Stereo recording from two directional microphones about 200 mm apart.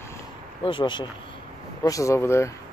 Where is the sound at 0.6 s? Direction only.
25° left (ahead or behind).